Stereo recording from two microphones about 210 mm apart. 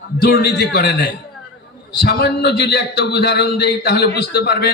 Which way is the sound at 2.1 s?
50° left (ahead or behind).